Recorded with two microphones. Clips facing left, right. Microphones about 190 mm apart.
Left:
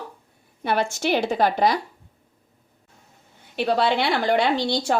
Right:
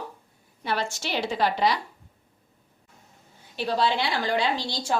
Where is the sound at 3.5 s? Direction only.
65° left (ahead or behind).